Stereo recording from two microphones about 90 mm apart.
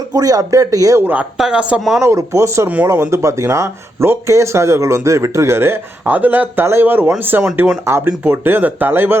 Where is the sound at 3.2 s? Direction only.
35° right (ahead or behind).